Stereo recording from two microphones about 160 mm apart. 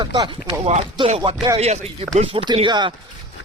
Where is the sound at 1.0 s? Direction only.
40° right (ahead or behind).